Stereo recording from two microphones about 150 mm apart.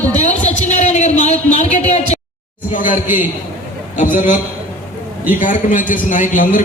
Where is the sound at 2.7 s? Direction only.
60° left (ahead or behind).